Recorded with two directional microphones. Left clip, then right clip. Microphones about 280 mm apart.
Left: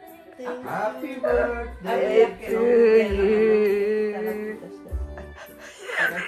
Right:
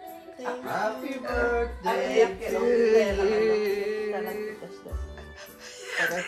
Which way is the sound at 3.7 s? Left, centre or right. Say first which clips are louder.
Left 6 dB; centre.